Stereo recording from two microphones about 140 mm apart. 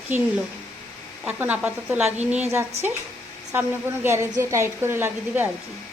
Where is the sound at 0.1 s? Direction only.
15° right (ahead or behind).